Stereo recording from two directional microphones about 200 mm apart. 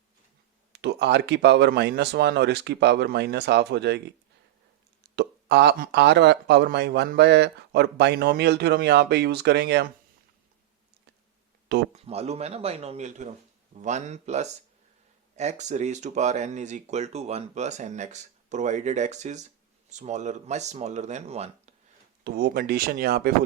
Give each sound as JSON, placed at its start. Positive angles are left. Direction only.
{"t": 0.7, "sound": "speech", "side_deg": -55}
{"t": 5.1, "sound": "speech", "side_deg": -55}
{"t": 11.9, "sound": "speech", "side_deg": -30}
{"t": 22.2, "sound": "speech", "side_deg": -50}